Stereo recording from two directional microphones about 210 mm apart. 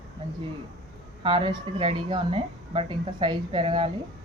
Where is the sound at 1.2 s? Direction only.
25° right (ahead or behind).